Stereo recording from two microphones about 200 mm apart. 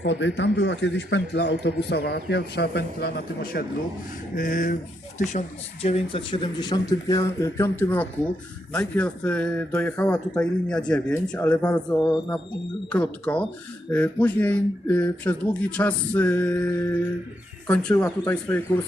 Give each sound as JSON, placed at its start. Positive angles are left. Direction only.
{"t": 0.0, "sound": "speech", "side_deg": 65}
{"t": 5.8, "sound": "speech", "side_deg": 30}